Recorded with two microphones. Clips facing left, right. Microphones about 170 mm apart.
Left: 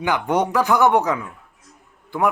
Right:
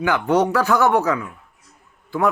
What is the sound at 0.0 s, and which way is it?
Speech, 15° left (ahead or behind).